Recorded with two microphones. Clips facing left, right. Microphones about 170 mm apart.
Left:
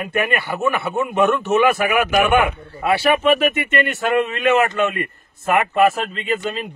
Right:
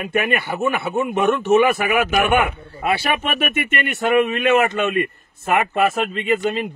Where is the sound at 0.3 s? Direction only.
20° right (ahead or behind).